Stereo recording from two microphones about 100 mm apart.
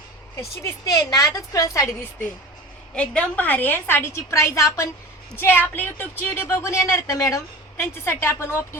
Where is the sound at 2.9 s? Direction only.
10° left (ahead or behind).